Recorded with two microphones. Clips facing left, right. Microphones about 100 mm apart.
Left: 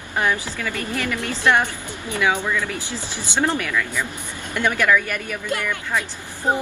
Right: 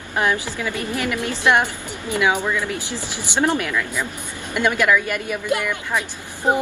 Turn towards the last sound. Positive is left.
turn(degrees=-15)  # may be behind; listen again after turning